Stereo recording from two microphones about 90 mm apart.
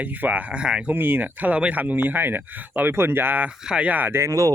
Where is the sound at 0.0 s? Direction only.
20° right (ahead or behind).